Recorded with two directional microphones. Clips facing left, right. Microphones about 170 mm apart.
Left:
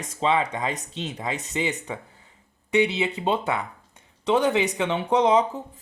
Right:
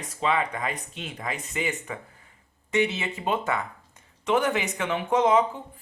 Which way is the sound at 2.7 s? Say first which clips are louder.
Left 4 dB; 15° left (ahead or behind).